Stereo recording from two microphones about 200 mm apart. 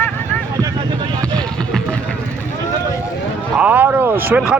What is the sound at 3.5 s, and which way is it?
Vehicle, 10° right (ahead or behind).